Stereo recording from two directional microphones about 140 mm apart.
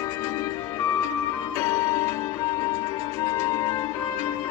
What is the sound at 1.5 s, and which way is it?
Music, 20° left (ahead or behind).